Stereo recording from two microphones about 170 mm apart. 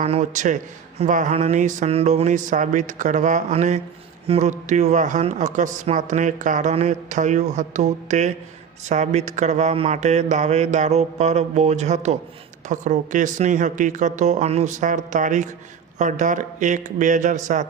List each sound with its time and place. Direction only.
0.0 s speech: 40° right (ahead or behind)